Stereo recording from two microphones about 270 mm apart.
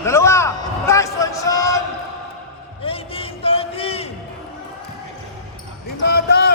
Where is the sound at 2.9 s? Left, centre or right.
Left.